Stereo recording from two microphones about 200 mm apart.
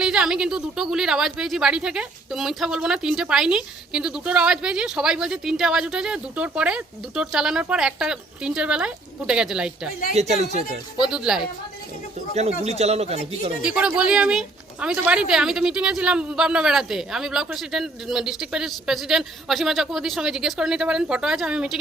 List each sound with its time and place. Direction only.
0.0 s speech: 5° right (ahead or behind)
10.2 s a man's voice: 35° right (ahead or behind)
11.0 s speech: 5° right (ahead or behind)
12.3 s a man's voice: 35° right (ahead or behind)
13.6 s speech: 5° right (ahead or behind)